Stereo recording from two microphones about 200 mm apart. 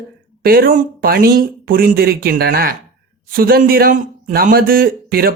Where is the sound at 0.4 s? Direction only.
45° right (ahead or behind).